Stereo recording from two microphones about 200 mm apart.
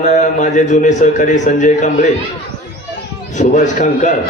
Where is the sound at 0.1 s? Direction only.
40° left (ahead or behind).